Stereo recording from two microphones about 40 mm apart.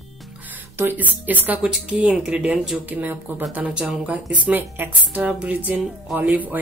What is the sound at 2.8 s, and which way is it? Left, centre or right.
Speech, right.